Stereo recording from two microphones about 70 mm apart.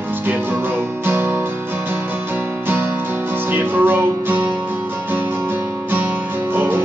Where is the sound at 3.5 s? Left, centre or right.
Right.